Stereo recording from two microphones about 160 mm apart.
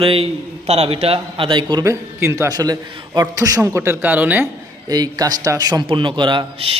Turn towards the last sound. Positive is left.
turn(degrees=-35)  # may be behind; listen again after turning